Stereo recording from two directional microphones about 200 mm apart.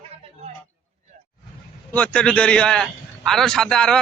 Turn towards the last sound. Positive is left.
turn(degrees=5)  # may be behind; listen again after turning